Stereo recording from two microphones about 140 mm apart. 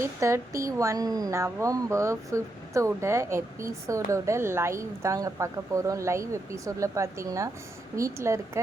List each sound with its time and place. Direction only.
0.0 s speech: 20° right (ahead or behind)